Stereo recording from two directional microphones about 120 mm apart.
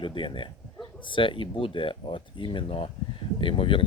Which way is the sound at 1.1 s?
45° left (ahead or behind).